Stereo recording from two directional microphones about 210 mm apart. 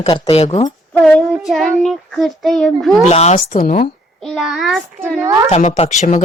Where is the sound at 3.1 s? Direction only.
30° left (ahead or behind).